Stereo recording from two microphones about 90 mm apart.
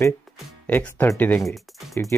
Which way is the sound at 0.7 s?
20° left (ahead or behind).